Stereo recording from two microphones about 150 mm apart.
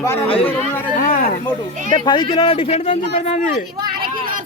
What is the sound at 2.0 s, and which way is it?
Speech, 30° left (ahead or behind).